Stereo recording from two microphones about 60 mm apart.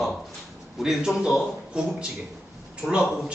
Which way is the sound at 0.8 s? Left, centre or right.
Centre.